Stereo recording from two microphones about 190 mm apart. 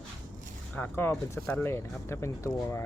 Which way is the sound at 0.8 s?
10° left (ahead or behind).